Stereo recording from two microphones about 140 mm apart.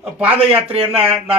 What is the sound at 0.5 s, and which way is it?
Speech, 45° right (ahead or behind).